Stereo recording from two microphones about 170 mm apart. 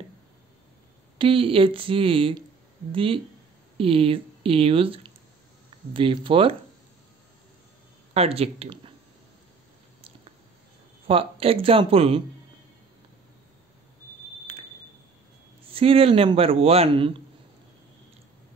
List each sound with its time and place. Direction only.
1.1 s a man's voice: 30° right (ahead or behind)
8.1 s speech: 35° right (ahead or behind)
11.1 s a man's voice: 35° right (ahead or behind)
14.5 s smoke detector: 35° right (ahead or behind)
15.7 s a man's voice: 35° right (ahead or behind)